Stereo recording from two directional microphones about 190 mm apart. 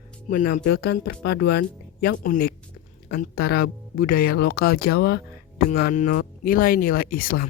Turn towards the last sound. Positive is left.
turn(degrees=50)  # may be behind; listen again after turning